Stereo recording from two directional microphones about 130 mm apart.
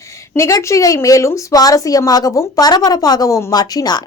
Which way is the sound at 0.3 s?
20° left (ahead or behind).